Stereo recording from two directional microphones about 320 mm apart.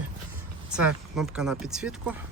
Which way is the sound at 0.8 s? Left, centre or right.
Centre.